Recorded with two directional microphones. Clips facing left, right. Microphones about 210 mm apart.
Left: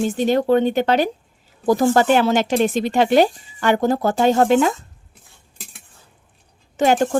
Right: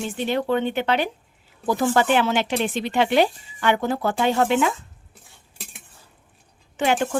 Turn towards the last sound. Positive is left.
turn(degrees=40)  # may be behind; listen again after turning